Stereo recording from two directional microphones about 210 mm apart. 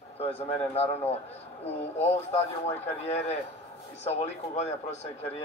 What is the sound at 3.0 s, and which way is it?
Speech, 30° left (ahead or behind).